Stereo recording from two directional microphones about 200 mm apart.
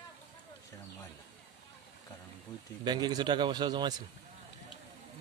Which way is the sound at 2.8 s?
20° right (ahead or behind).